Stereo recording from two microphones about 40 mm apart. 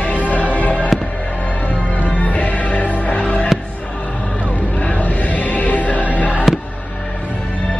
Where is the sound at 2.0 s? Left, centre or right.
Left.